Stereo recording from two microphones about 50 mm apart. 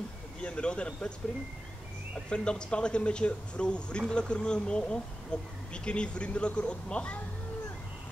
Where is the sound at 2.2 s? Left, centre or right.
Centre.